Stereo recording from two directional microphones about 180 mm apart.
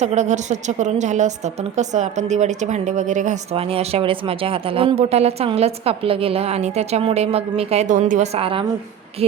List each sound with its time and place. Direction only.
0.0 s a woman's voice: 40° right (ahead or behind)
8.4 s a woman's voice: 30° right (ahead or behind)